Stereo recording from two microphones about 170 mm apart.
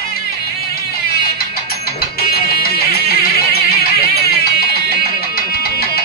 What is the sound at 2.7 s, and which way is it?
Music, 65° left (ahead or behind).